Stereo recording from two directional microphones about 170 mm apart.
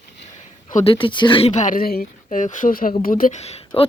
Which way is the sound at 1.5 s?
50° left (ahead or behind).